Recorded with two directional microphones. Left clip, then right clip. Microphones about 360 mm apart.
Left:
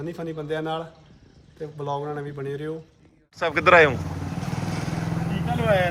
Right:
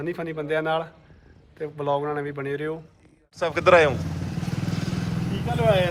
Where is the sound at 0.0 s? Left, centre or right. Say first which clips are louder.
Right 3 dB; centre.